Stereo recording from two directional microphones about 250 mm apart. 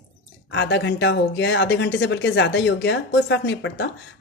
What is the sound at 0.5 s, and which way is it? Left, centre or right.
Speech, left.